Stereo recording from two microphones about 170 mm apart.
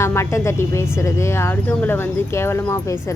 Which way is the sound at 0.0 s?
15° left (ahead or behind).